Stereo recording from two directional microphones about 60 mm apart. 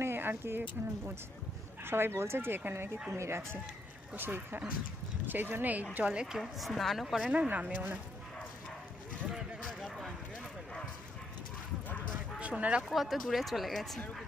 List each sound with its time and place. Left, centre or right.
0.0 s speech: right
4.1 s speech: right
5.9 s a woman's voice: centre
6.4 s speech: centre
7.4 s speech: right
9.3 s a sound: centre
12.4 s speech: right
12.8 s speech: centre